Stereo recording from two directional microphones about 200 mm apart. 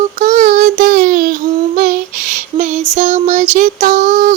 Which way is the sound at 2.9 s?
35° right (ahead or behind).